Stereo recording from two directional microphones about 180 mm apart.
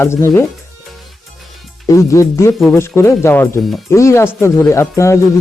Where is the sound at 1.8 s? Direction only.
15° left (ahead or behind).